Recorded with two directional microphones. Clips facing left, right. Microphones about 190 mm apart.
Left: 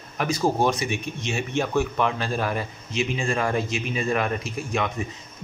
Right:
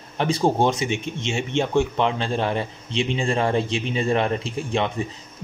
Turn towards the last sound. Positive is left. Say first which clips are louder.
# right 3 dB
turn(degrees=-30)  # may be behind; listen again after turning